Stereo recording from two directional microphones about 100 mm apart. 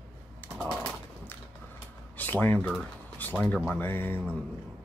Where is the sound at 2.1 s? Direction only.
20° left (ahead or behind).